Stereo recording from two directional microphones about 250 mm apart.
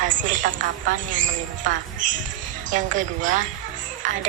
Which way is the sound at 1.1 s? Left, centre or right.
Right.